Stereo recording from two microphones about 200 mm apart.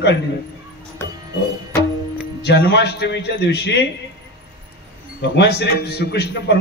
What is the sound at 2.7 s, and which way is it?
A man's voice, 60° left (ahead or behind).